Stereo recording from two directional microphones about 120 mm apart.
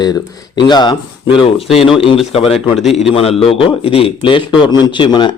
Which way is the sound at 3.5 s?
50° left (ahead or behind).